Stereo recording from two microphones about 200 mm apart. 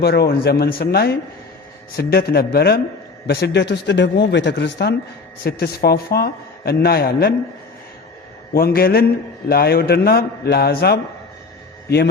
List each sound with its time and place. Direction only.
0.0 s a man's voice: 50° left (ahead or behind)
8.5 s a man's voice: 50° left (ahead or behind)